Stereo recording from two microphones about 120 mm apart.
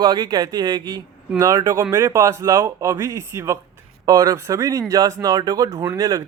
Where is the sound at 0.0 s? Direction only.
35° right (ahead or behind).